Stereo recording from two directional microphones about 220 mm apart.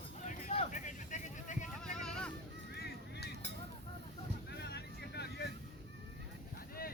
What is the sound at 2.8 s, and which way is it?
Vehicle, 45° left (ahead or behind).